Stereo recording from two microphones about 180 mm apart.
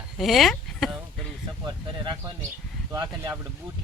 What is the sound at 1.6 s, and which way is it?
Speech, 25° right (ahead or behind).